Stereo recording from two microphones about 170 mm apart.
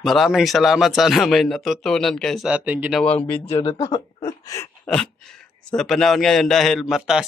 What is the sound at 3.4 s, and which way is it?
Speech, 35° left (ahead or behind).